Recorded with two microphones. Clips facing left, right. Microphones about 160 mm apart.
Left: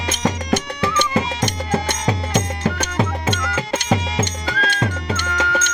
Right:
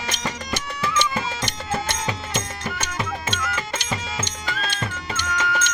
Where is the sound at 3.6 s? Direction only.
70° left (ahead or behind).